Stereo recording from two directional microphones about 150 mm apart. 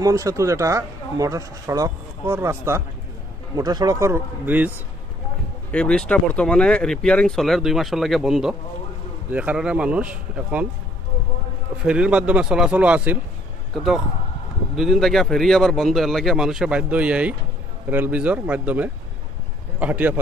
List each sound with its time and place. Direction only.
0.0 s speech: 20° right (ahead or behind)
5.7 s speech: 5° left (ahead or behind); by 10.7 s 10° right (ahead or behind)
11.8 s speech: 5° right (ahead or behind)
14.8 s speech: centre (ahead or behind)